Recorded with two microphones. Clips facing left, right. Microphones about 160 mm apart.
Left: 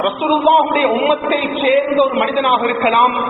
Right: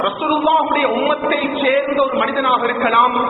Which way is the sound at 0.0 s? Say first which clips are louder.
Left 3 dB; 20° left (ahead or behind).